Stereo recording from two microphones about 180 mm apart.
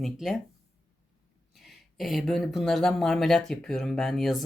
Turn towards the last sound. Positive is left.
turn(degrees=0)  # may be behind; listen again after turning